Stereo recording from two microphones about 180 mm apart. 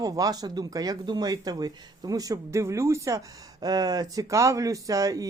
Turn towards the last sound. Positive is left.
turn(degrees=-20)  # may be behind; listen again after turning